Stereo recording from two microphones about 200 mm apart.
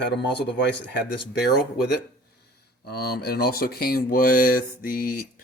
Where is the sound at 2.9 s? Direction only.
50° left (ahead or behind).